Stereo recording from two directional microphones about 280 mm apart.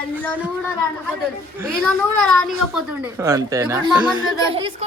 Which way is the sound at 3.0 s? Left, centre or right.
Centre.